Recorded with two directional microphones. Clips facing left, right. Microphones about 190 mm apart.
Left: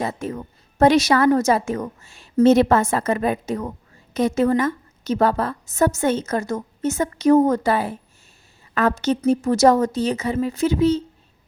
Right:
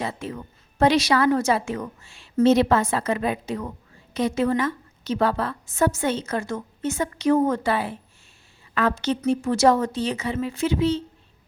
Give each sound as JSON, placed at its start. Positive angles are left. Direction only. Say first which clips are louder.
{"t": 0.0, "sound": "a woman's voice", "louder": "left 4 dB", "side_deg": 45}